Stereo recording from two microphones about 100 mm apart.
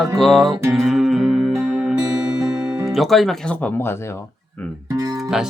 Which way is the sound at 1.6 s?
10° right (ahead or behind).